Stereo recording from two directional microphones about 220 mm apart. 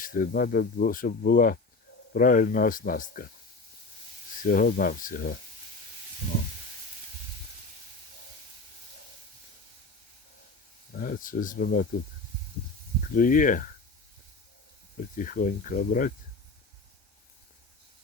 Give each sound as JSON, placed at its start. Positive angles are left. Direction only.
{"t": 0.0, "sound": "speech", "side_deg": 40}
{"t": 4.4, "sound": "speech", "side_deg": 40}
{"t": 10.9, "sound": "speech", "side_deg": 40}
{"t": 13.1, "sound": "speech", "side_deg": 40}
{"t": 15.1, "sound": "speech", "side_deg": 35}